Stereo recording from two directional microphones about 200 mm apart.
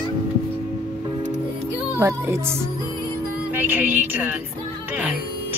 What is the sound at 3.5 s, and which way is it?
Music, 10° right (ahead or behind).